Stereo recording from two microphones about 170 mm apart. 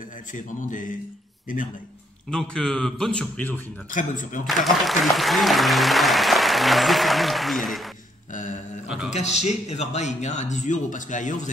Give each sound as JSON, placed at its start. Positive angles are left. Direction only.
{"t": 0.3, "sound": "speech", "side_deg": 50}
{"t": 2.3, "sound": "speech", "side_deg": 5}
{"t": 3.9, "sound": "speech", "side_deg": 50}
{"t": 4.6, "sound": "speech", "side_deg": 0}
{"t": 8.3, "sound": "a sound", "side_deg": 50}
{"t": 8.8, "sound": "a man's voice", "side_deg": -5}
{"t": 9.1, "sound": "speech", "side_deg": 40}